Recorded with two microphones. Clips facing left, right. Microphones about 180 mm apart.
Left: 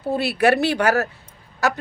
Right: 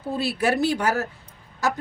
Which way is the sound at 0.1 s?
65° left (ahead or behind).